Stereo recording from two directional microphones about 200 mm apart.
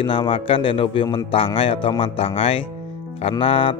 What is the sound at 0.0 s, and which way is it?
Speech, 25° left (ahead or behind).